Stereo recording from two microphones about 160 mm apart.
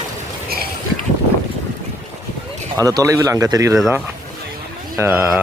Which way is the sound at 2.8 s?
20° right (ahead or behind).